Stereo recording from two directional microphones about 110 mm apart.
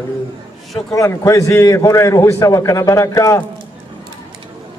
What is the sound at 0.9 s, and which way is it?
A man's voice, 30° left (ahead or behind).